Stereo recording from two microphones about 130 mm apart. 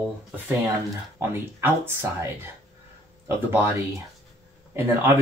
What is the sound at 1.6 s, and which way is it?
Speech, 20° right (ahead or behind).